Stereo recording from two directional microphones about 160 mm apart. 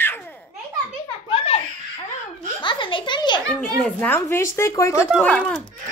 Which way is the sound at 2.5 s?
30° left (ahead or behind).